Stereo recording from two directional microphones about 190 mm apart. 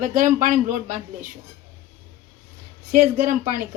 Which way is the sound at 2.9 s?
45° right (ahead or behind).